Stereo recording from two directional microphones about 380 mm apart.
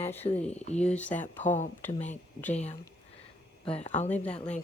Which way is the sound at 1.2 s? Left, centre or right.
Centre.